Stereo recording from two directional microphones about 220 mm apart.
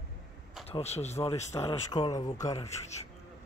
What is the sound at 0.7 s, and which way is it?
Speech, 30° left (ahead or behind).